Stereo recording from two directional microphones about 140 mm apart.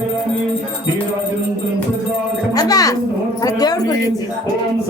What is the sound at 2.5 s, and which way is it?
Music, 25° left (ahead or behind).